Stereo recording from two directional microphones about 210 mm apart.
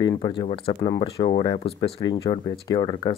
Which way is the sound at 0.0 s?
20° left (ahead or behind).